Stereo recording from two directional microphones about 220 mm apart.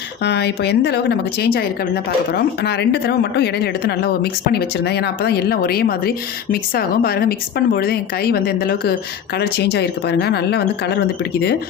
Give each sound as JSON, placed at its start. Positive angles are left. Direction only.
{"t": 0.2, "sound": "a woman's voice", "side_deg": 50}